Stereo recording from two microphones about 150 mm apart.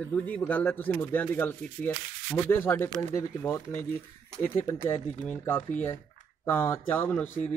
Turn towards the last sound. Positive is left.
turn(degrees=15)  # may be behind; listen again after turning